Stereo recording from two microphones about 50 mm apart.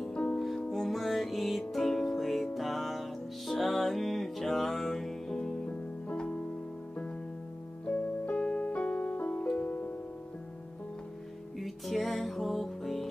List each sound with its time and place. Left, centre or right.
0.0 s music: centre
0.7 s music: centre
5.7 s music: left
7.8 s piano: left
9.2 s music: left
11.6 s music: centre